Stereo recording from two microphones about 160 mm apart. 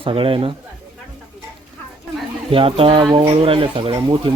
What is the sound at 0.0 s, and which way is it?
Speech, 35° right (ahead or behind).